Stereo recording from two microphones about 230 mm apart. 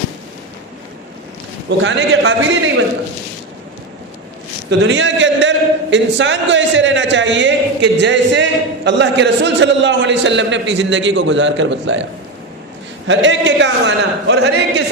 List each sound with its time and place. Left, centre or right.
1.8 s a man's voice: right
4.9 s a man's voice: right
13.1 s a man's voice: right